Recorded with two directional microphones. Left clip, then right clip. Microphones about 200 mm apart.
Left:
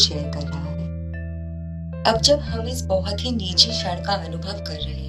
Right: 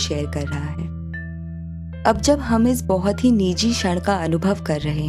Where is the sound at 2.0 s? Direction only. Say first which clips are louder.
Even; 50° right (ahead or behind).